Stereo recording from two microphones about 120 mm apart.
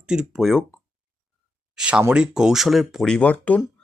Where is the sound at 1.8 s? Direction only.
5° right (ahead or behind); by 3.6 s 10° left (ahead or behind).